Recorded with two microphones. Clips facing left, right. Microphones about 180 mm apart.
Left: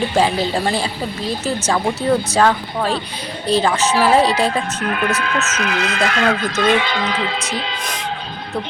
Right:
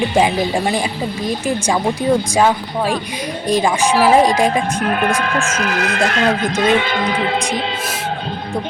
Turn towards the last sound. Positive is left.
turn(degrees=-50)  # may be behind; listen again after turning